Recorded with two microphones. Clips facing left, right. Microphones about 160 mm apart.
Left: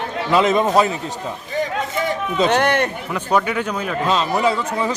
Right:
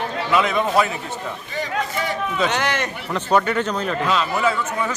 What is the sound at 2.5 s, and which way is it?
Speech, 50° left (ahead or behind).